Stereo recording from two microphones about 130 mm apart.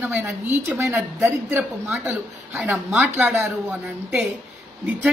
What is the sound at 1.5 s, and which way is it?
A woman's voice, 15° right (ahead or behind).